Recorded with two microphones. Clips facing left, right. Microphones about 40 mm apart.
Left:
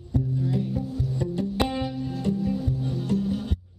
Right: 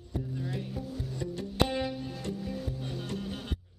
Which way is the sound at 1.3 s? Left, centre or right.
Centre.